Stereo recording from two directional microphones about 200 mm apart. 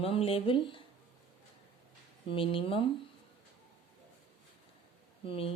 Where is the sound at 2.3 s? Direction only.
25° left (ahead or behind).